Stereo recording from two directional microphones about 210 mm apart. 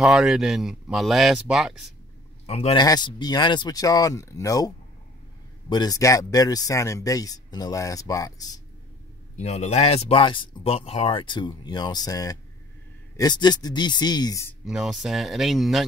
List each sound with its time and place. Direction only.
0.0 s speech: centre (ahead or behind)
2.4 s speech: 30° left (ahead or behind)
9.4 s speech: 30° left (ahead or behind)
14.6 s speech: centre (ahead or behind)